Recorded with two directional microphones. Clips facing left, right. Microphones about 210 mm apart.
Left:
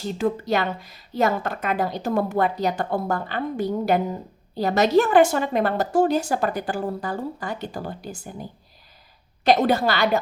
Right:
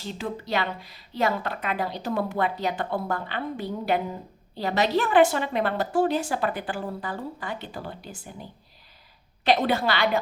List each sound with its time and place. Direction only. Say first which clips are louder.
0.0 s a woman's voice: left 8 dB; 45° left (ahead or behind)